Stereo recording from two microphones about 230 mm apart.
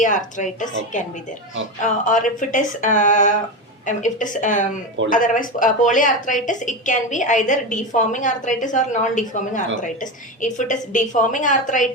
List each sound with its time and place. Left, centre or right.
0.0 s a woman's voice: left